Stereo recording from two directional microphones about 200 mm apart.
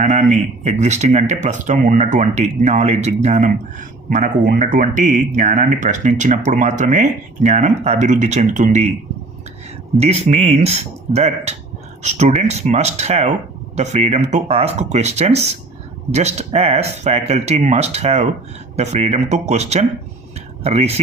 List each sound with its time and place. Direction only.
0.0 s speech: 40° right (ahead or behind)
10.0 s speech: 30° right (ahead or behind)